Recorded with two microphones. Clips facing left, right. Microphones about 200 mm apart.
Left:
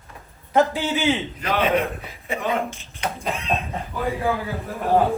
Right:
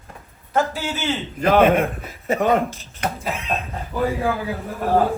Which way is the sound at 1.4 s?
50° right (ahead or behind).